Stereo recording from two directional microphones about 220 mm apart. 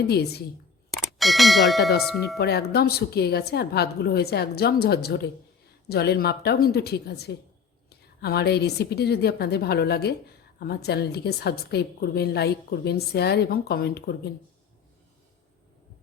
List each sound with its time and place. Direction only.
0.1 s a woman's voice: 45° left (ahead or behind)
1.2 s speech: centre (ahead or behind)
2.4 s a woman's voice: 45° left (ahead or behind)